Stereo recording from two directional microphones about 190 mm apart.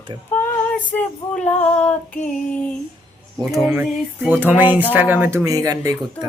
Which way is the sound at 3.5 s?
5° right (ahead or behind).